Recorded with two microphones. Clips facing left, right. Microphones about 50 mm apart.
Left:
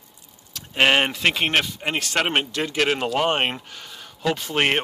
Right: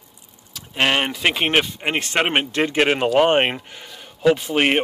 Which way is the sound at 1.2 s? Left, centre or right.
Centre.